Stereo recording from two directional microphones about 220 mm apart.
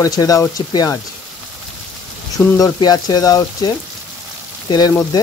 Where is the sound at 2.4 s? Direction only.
10° left (ahead or behind).